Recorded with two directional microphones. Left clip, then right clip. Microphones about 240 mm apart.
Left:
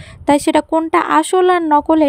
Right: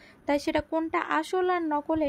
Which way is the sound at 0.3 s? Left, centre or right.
Left.